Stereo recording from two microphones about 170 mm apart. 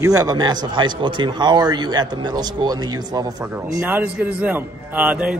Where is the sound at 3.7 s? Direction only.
10° right (ahead or behind).